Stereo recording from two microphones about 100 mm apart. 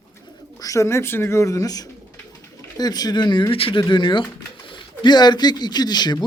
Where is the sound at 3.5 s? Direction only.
65° left (ahead or behind).